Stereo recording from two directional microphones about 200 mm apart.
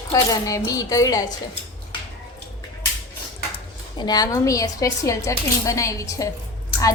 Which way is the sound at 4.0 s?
20° left (ahead or behind).